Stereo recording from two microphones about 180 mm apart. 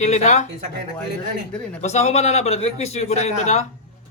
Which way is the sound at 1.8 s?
35° left (ahead or behind).